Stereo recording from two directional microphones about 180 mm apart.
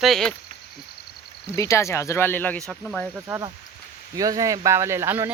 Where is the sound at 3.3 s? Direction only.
15° right (ahead or behind).